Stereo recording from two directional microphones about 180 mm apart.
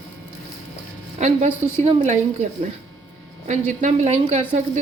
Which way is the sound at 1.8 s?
35° right (ahead or behind).